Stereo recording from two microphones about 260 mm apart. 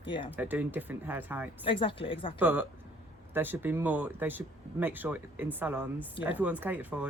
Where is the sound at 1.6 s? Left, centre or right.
Centre.